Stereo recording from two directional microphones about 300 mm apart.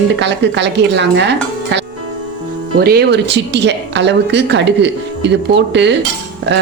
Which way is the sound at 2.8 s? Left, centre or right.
Right.